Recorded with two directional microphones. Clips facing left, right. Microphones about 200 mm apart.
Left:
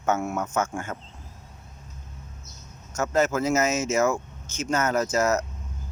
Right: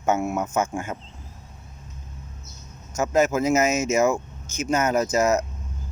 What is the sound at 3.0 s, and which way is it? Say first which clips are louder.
Speech: right 3 dB; 10° right (ahead or behind).